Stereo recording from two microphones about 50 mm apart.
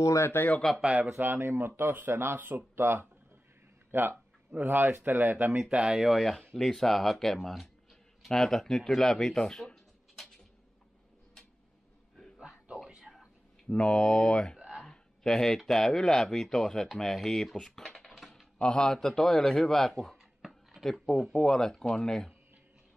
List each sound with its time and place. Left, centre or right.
0.0 s speech: left
0.7 s speech: centre
1.1 s speech: right
5.7 s speech: centre
6.2 s speech: centre
12.6 s a sound: centre
13.7 s speech: centre
17.7 s typing: centre
18.6 s speech: centre
20.4 s a sound: centre
21.3 s speech: centre